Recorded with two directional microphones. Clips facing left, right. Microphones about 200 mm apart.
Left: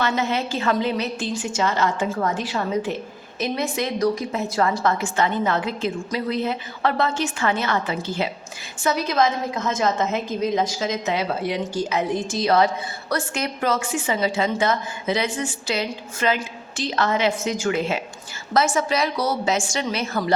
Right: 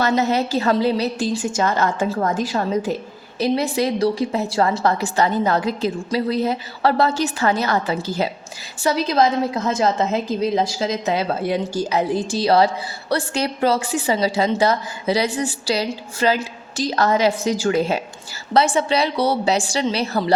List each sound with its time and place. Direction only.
0.0 s a woman's voice: 40° right (ahead or behind)
1.5 s a woman's voice: 45° right (ahead or behind)